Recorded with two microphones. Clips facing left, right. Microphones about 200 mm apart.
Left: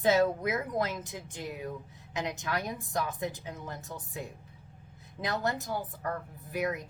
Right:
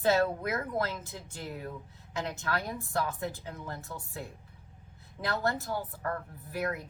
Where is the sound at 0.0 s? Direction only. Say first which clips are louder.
Left 1 dB; 20° left (ahead or behind).